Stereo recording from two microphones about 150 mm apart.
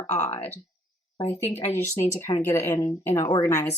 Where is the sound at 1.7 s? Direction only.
15° left (ahead or behind).